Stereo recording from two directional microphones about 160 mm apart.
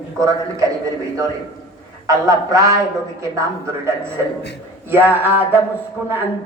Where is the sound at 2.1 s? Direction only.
20° right (ahead or behind).